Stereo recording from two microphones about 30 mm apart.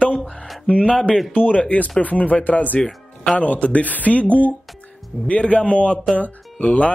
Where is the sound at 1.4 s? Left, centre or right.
Left.